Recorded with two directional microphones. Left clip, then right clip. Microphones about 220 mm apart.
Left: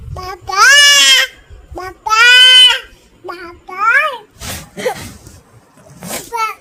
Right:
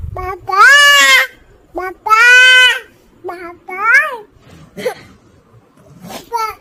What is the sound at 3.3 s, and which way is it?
Child singing, 5° right (ahead or behind).